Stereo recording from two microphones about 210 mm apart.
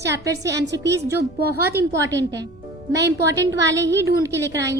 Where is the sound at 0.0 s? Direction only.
55° right (ahead or behind).